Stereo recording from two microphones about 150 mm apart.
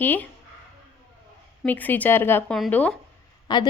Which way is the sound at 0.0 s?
10° left (ahead or behind).